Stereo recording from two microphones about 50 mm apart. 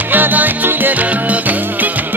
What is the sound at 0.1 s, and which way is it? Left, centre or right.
Music, right.